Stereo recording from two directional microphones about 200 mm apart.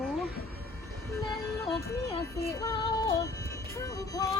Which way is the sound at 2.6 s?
20° left (ahead or behind).